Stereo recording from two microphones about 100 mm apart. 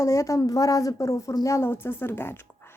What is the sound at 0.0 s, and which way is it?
Speech, 30° left (ahead or behind).